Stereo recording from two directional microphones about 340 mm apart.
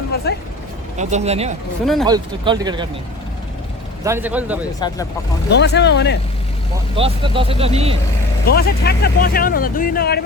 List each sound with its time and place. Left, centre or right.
0.3 s a sound: left
0.9 s speech: centre
4.0 s speech: centre
4.8 s speech: centre
5.5 s speech: left
6.9 s speech: centre
8.5 s speech: left